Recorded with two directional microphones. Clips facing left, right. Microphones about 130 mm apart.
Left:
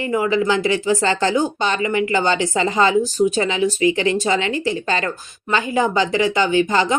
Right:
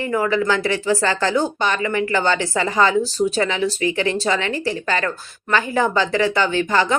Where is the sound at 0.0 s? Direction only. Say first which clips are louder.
Left 1 dB; 15° left (ahead or behind).